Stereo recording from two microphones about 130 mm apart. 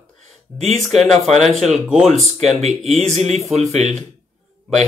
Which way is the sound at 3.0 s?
60° right (ahead or behind).